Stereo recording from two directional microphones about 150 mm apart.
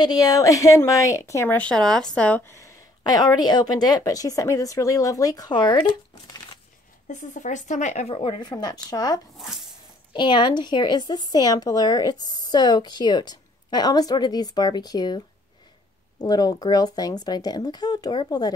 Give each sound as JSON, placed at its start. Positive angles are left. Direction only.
{"t": 0.0, "sound": "speech", "side_deg": 25}
{"t": 7.1, "sound": "speech", "side_deg": 55}
{"t": 8.1, "sound": "speech", "side_deg": 35}